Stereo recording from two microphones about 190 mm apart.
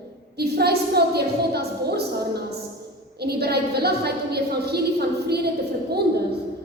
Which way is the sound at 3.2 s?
55° right (ahead or behind).